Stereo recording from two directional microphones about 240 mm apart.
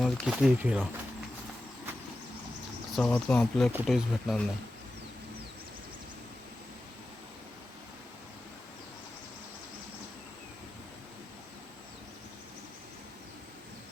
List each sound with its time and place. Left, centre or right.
0.0 s speech: centre
2.9 s speech: centre